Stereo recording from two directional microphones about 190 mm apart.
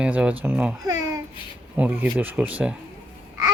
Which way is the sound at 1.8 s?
10° right (ahead or behind).